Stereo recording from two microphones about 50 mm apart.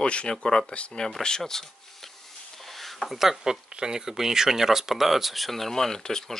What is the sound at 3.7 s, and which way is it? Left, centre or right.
Speech, centre.